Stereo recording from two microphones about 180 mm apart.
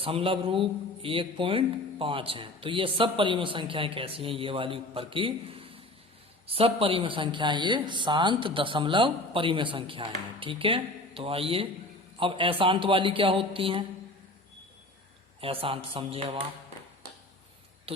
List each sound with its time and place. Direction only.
0.0 s a man's voice: 30° right (ahead or behind)
15.4 s a man's voice: 30° right (ahead or behind)
17.9 s speech: 30° right (ahead or behind)